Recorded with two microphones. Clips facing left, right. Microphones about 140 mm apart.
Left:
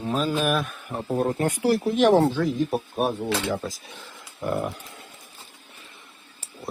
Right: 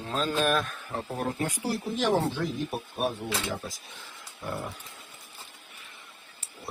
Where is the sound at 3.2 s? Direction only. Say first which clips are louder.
Left 6 dB; 70° left (ahead or behind).